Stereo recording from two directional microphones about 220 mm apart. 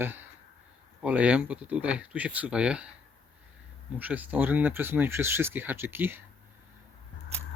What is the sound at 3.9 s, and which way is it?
Speech, 10° right (ahead or behind).